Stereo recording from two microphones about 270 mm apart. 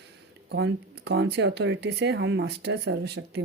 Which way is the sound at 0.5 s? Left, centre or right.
Right.